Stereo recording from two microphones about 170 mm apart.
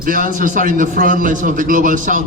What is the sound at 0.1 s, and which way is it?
A man's voice, 55° right (ahead or behind).